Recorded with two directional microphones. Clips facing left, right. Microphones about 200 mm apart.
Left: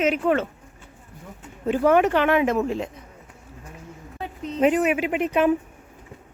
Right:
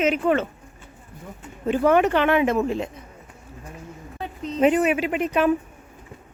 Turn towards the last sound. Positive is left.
turn(degrees=15)  # may be behind; listen again after turning